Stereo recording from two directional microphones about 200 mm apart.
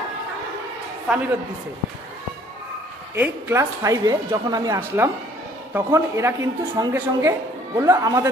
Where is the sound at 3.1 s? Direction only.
10° right (ahead or behind).